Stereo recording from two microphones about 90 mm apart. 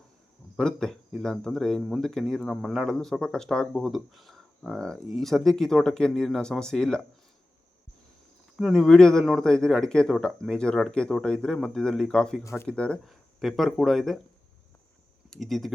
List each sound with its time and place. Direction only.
0.5 s speech: 5° left (ahead or behind)
8.6 s speech: 5° left (ahead or behind)
12.4 s speech: 35° left (ahead or behind)
12.6 s speech: 10° left (ahead or behind)
13.1 s speech: centre (ahead or behind)
15.3 s speech: 5° left (ahead or behind)